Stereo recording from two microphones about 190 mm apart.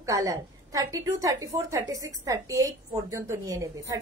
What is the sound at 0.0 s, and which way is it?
A woman's voice, 15° right (ahead or behind).